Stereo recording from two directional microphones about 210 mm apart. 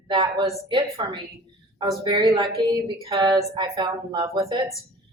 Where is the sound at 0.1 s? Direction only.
20° right (ahead or behind).